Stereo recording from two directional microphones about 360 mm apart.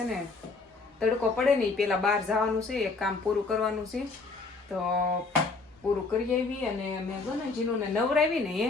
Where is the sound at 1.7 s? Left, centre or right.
Centre.